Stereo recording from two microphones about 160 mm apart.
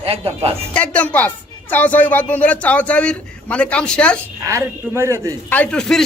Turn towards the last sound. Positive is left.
turn(degrees=5)  # may be behind; listen again after turning